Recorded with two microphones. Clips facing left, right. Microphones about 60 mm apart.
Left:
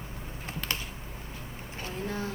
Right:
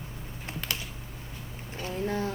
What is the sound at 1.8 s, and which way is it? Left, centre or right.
Speech, right.